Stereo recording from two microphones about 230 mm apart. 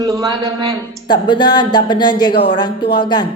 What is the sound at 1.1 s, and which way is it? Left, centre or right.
A woman's voice, centre.